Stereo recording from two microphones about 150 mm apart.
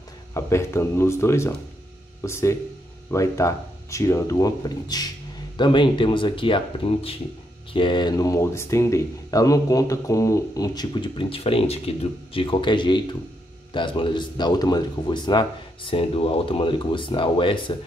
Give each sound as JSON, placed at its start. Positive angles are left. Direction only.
{"t": 0.3, "sound": "speech", "side_deg": 20}